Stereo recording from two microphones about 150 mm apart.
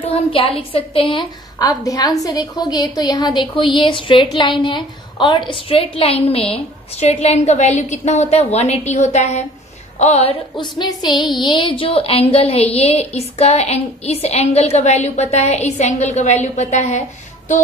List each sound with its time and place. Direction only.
0.1 s a woman's voice: 40° left (ahead or behind)
1.6 s a woman's voice: 20° left (ahead or behind); by 10.3 s 45° left (ahead or behind)
10.6 s a woman's voice: 30° left (ahead or behind); by 17.0 s 50° left (ahead or behind)